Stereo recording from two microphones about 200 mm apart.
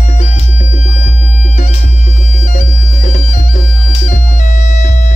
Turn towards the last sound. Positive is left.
turn(degrees=35)  # may be behind; listen again after turning